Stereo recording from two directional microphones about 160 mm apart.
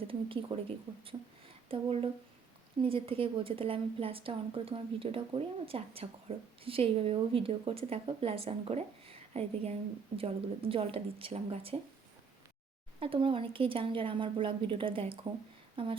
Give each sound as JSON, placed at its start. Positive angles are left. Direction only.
{"t": 0.5, "sound": "a woman's voice", "side_deg": -30}
{"t": 1.7, "sound": "a woman's voice", "side_deg": -35}
{"t": 13.0, "sound": "a woman's voice", "side_deg": -35}